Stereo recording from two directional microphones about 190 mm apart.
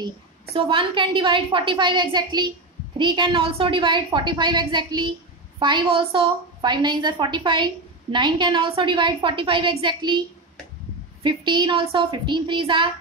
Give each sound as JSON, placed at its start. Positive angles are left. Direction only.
{"t": 0.0, "sound": "a woman's voice", "side_deg": -30}
{"t": 11.2, "sound": "a woman's voice", "side_deg": -25}